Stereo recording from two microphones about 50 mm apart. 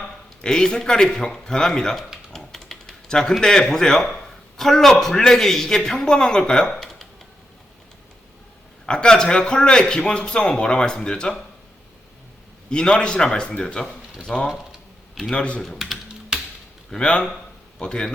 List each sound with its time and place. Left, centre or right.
0.4 s a man's voice: centre
2.3 s typing: centre
3.4 s a man's voice: centre
8.9 s a man's voice: centre
12.7 s a man's voice: centre
15.6 s speech: centre
16.9 s a man's voice: centre